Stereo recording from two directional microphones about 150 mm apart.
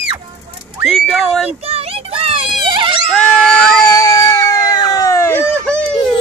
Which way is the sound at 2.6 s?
35° right (ahead or behind).